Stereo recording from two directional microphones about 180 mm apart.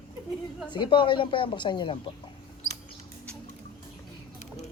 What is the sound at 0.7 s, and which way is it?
A woman's voice, 25° left (ahead or behind).